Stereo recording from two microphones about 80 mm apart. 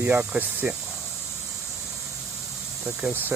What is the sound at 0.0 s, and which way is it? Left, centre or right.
Speech, right.